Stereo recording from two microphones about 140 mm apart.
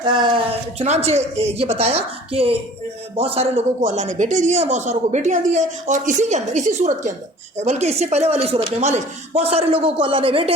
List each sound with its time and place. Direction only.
0.0 s speech: 35° right (ahead or behind)
0.8 s speech: 50° right (ahead or behind)
3.8 s a woman's voice: 60° right (ahead or behind); by 10.5 s 40° right (ahead or behind)